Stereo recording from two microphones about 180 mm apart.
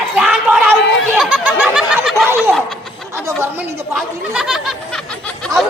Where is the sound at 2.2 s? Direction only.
15° right (ahead or behind).